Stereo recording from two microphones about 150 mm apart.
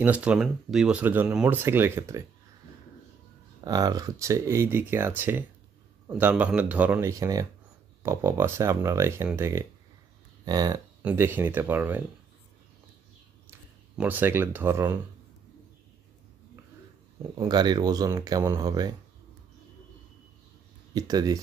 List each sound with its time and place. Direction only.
0.0 s speech: 10° right (ahead or behind)
3.6 s speech: 25° right (ahead or behind)
11.0 s speech: 15° right (ahead or behind)
13.9 s speech: 10° right (ahead or behind)
17.4 s speech: 30° right (ahead or behind)
20.9 s speech: 25° right (ahead or behind)